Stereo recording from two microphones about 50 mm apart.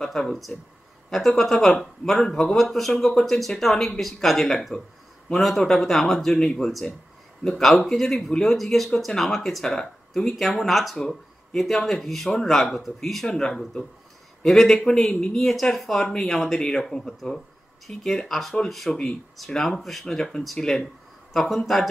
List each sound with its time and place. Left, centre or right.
0.0 s speech: centre
14.4 s speech: centre
15.0 s a woman's voice: left
15.3 s speech: centre